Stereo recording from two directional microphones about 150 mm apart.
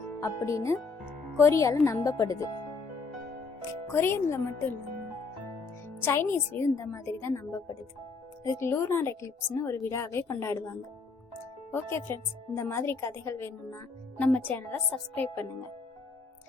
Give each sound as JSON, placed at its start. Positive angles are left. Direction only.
{"t": 0.2, "sound": "a woman's voice", "side_deg": 20}
{"t": 3.9, "sound": "a woman's voice", "side_deg": 15}
{"t": 6.1, "sound": "a woman's voice", "side_deg": 15}
{"t": 11.7, "sound": "a woman's voice", "side_deg": 15}
{"t": 15.1, "sound": "a woman's voice", "side_deg": 15}